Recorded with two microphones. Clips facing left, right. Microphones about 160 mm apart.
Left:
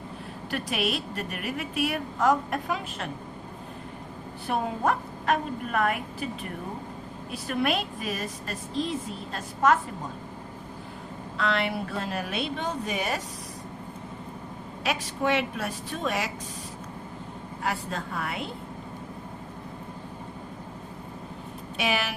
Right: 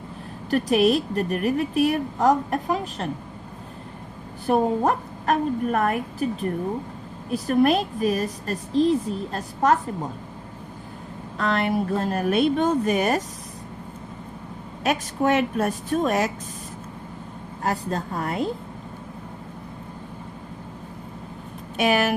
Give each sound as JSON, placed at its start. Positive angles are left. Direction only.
{"t": 0.5, "sound": "a woman's voice", "side_deg": -40}
{"t": 4.4, "sound": "a woman's voice", "side_deg": -40}
{"t": 11.3, "sound": "a woman's voice", "side_deg": -45}
{"t": 14.8, "sound": "a woman's voice", "side_deg": -45}
{"t": 17.6, "sound": "a woman's voice", "side_deg": -40}
{"t": 21.8, "sound": "a woman's voice", "side_deg": -50}